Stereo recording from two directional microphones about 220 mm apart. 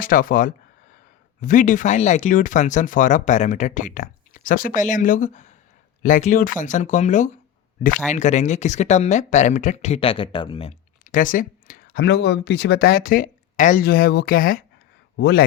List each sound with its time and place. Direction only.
0.0 s speech: 40° left (ahead or behind); by 10.8 s 25° left (ahead or behind)
11.0 s speech: 35° left (ahead or behind)